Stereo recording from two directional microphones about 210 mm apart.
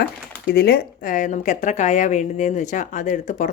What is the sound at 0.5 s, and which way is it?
A woman's voice, 50° left (ahead or behind).